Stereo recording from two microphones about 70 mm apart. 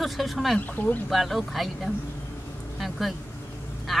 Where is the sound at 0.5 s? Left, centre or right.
Left.